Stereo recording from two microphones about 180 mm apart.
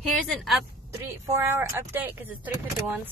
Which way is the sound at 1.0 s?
15° right (ahead or behind).